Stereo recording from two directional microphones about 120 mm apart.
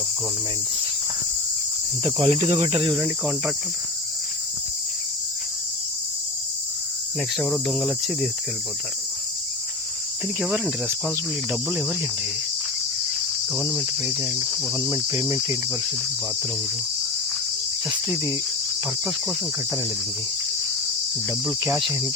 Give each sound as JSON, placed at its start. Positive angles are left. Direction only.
{"t": 2.2, "sound": "speech", "side_deg": -65}
{"t": 3.0, "sound": "cricket", "side_deg": -10}
{"t": 7.3, "sound": "cricket", "side_deg": 0}
{"t": 14.2, "sound": "cricket", "side_deg": -15}
{"t": 17.8, "sound": "cricket", "side_deg": -30}
{"t": 21.4, "sound": "cricket", "side_deg": -25}